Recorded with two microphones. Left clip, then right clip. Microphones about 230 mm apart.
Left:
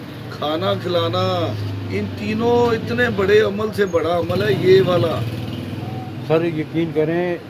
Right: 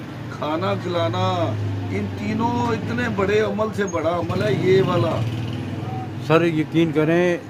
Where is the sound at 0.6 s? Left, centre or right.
Centre.